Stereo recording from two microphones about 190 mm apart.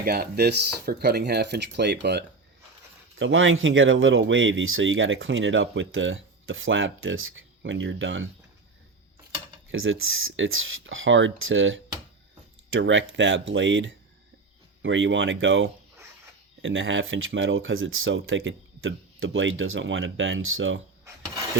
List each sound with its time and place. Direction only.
0.0 s speech: 55° right (ahead or behind)
3.2 s speech: 90° right
9.7 s speech: 90° right